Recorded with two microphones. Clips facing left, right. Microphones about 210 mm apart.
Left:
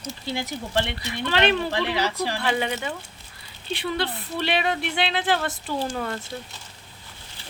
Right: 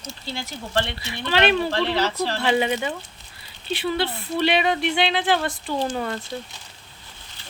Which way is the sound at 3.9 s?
Centre (ahead or behind).